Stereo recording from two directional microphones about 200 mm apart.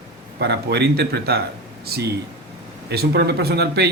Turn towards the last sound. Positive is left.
turn(degrees=-55)  # may be behind; listen again after turning